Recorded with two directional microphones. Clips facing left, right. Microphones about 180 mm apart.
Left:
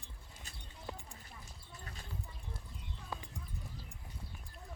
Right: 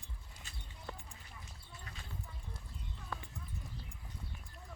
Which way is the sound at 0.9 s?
15° left (ahead or behind).